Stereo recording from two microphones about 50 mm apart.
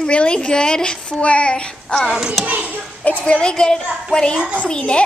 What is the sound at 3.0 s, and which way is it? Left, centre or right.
A child's voice, left.